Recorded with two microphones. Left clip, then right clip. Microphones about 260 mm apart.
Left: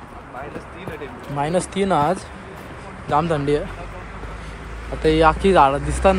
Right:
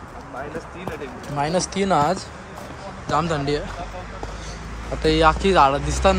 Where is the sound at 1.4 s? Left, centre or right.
Centre.